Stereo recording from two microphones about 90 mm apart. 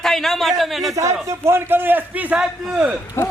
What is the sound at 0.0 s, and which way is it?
Speech, 5° left (ahead or behind).